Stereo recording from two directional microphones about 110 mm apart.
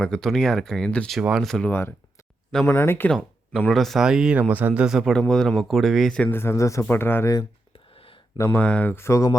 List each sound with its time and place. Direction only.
0.0 s speech: 5° left (ahead or behind)
1.2 s speech: 5° right (ahead or behind)
2.6 s speech: 20° left (ahead or behind)
3.7 s speech: centre (ahead or behind)
6.3 s speech: 25° left (ahead or behind)
8.5 s speech: 15° left (ahead or behind)